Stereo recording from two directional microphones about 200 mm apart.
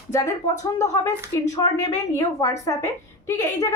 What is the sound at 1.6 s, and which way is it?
A woman's voice, 15° left (ahead or behind).